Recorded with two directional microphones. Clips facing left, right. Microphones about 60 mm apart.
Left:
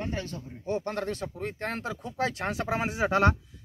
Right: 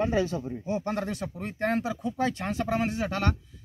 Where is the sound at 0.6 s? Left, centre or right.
Centre.